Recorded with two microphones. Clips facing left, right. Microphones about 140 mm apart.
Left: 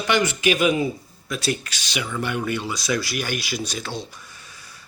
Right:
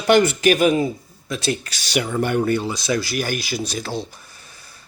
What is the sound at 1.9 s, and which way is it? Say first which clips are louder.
Speech: right 6 dB; 45° right (ahead or behind).